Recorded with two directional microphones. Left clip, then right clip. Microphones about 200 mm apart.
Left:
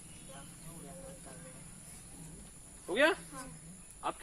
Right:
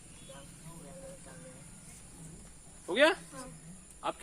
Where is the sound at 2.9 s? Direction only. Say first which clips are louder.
Right 3 dB; 45° right (ahead or behind).